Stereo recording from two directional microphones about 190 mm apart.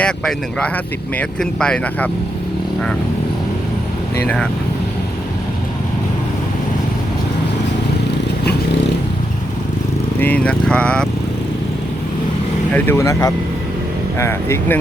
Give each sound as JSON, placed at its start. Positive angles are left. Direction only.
{"t": 0.0, "sound": "speech", "side_deg": 5}
{"t": 10.2, "sound": "speech", "side_deg": 10}
{"t": 12.7, "sound": "speech", "side_deg": 10}